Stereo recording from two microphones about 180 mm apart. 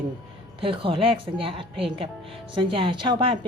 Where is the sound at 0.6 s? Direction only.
30° right (ahead or behind).